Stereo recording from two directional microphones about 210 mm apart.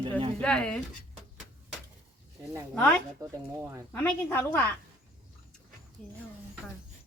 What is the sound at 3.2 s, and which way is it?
Speech, 10° right (ahead or behind).